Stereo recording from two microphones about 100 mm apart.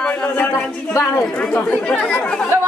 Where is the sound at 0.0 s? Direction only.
10° left (ahead or behind).